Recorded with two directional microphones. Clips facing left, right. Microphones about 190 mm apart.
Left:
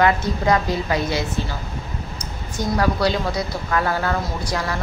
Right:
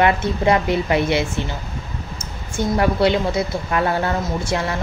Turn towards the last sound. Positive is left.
turn(degrees=-25)  # may be behind; listen again after turning